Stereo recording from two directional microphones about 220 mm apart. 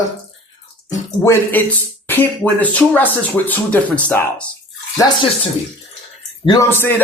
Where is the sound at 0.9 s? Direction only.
10° left (ahead or behind).